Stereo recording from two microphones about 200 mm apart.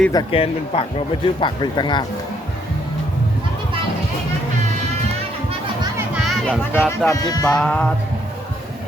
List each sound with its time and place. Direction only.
0.1 s speech: 25° left (ahead or behind)
6.2 s speech: 5° left (ahead or behind)
7.1 s speech: 20° left (ahead or behind)
7.5 s a sound: 5° left (ahead or behind)